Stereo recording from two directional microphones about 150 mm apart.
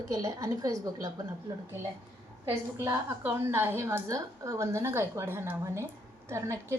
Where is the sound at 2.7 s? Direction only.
20° right (ahead or behind).